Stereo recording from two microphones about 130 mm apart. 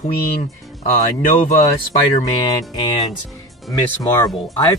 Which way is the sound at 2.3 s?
35° left (ahead or behind).